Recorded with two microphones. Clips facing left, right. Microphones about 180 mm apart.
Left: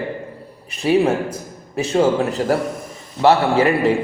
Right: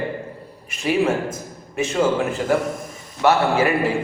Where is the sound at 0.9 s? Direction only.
35° left (ahead or behind).